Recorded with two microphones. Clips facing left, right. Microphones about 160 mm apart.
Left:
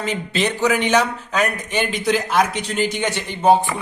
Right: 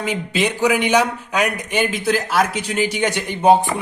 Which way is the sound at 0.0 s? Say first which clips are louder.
Right 1 dB; 10° right (ahead or behind).